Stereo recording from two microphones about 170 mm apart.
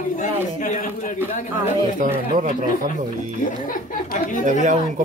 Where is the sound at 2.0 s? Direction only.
50° right (ahead or behind).